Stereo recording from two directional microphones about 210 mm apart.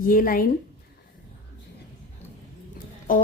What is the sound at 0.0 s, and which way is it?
Speech, 40° left (ahead or behind).